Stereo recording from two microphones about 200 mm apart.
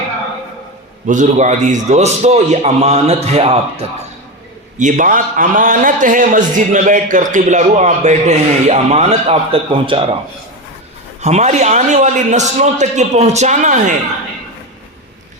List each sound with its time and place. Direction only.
1.0 s a man's voice: 40° right (ahead or behind)
4.8 s a man's voice: 40° right (ahead or behind)
11.2 s a man's voice: 35° right (ahead or behind)